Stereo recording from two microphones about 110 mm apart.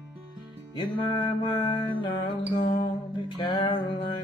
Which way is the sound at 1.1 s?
45° left (ahead or behind).